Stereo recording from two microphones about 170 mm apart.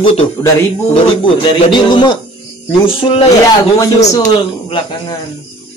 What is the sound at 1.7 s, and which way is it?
Speech, 25° left (ahead or behind).